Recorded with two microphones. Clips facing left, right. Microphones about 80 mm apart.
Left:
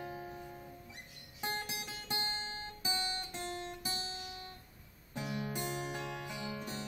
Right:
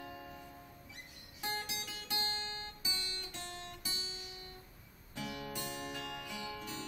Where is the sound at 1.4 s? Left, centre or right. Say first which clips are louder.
Left 1 dB; left.